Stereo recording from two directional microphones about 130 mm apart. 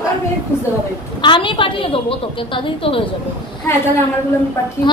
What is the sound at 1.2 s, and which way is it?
Child singing, 40° left (ahead or behind).